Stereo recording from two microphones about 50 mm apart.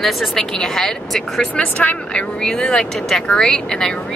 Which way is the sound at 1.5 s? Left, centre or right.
Left.